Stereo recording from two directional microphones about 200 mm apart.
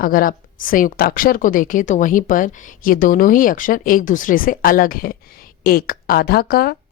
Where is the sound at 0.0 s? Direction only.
45° left (ahead or behind).